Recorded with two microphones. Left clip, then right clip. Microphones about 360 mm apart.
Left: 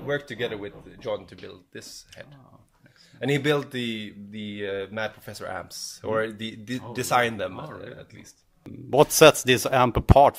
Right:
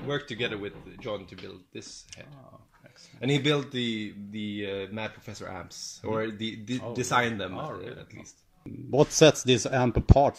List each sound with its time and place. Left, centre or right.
0.1 s speech: left
8.9 s speech: left